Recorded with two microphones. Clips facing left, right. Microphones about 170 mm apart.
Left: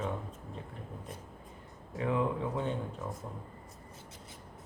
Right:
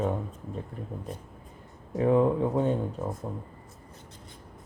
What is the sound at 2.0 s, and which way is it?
Speech, 40° right (ahead or behind).